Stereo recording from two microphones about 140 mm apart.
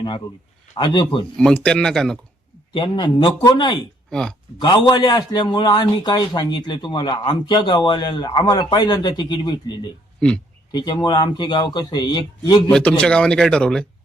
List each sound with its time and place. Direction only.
0.8 s a man's voice: 30° left (ahead or behind)
1.4 s speech: 5° left (ahead or behind)
2.7 s a man's voice: 35° left (ahead or behind)
4.1 s speech: 5° left (ahead or behind)
4.6 s a man's voice: 30° left (ahead or behind)
10.2 s speech: 5° left (ahead or behind)
10.7 s a man's voice: 30° left (ahead or behind)
12.7 s speech: 5° left (ahead or behind)